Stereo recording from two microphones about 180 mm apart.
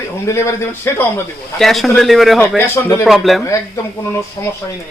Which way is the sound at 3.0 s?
Centre (ahead or behind).